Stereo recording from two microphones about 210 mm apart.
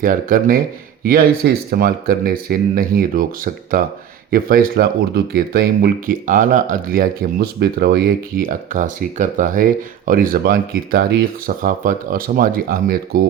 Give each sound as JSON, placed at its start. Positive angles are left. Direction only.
{"t": 0.0, "sound": "speech", "side_deg": -40}